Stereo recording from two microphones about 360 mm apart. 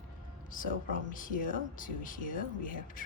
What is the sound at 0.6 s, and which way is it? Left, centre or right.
Speech, left.